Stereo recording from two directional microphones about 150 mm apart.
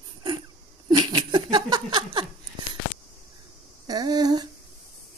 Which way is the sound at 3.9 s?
25° right (ahead or behind).